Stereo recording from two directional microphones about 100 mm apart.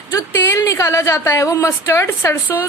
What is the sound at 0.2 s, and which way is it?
A woman's voice, 25° left (ahead or behind).